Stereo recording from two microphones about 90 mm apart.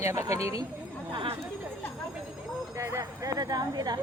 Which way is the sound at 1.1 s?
75° right (ahead or behind).